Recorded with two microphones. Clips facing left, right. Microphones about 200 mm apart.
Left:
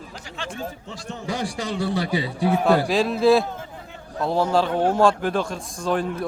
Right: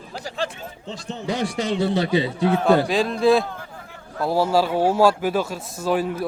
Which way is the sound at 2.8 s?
Centre (ahead or behind).